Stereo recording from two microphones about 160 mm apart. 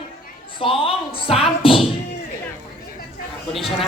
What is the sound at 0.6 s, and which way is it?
A woman's voice, 35° left (ahead or behind).